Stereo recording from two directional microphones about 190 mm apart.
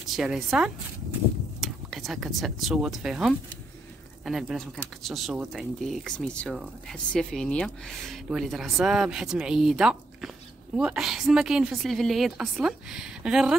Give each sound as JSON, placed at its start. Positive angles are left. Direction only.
{"t": 0.0, "sound": "speech", "side_deg": 0}